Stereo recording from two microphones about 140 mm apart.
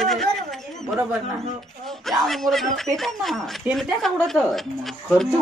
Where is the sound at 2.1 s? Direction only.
Centre (ahead or behind).